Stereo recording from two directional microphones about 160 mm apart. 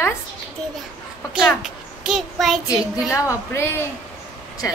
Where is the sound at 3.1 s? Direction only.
15° left (ahead or behind).